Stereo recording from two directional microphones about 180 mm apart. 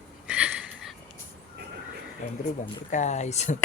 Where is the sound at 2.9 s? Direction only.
40° left (ahead or behind).